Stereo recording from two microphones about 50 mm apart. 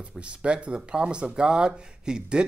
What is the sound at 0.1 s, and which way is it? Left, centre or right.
Speech, right.